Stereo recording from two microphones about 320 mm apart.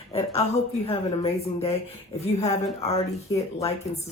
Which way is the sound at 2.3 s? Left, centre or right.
Centre.